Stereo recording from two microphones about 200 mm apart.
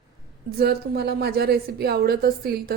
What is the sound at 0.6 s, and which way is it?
A woman's voice, 55° right (ahead or behind).